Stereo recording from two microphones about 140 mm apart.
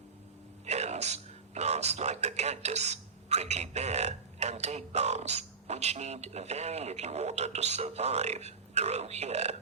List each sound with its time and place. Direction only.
0.6 s speech: 50° right (ahead or behind)